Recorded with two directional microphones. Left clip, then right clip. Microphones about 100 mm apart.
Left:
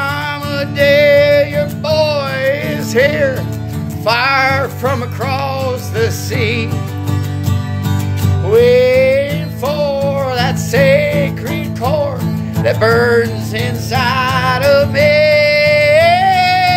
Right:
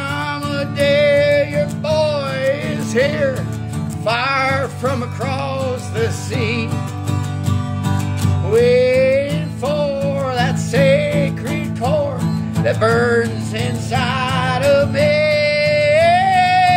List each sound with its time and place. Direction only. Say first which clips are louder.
0.6 s music: left 5 dB; 15° right (ahead or behind)
8.5 s music: left 4 dB; 25° right (ahead or behind)
12.6 s music: left 4 dB; 15° right (ahead or behind)